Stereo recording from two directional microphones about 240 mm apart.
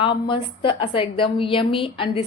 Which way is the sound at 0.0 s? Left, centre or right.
Left.